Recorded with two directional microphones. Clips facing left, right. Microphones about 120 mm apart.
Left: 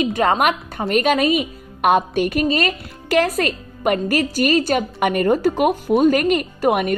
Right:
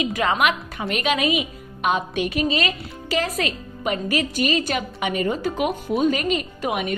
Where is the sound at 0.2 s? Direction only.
40° left (ahead or behind).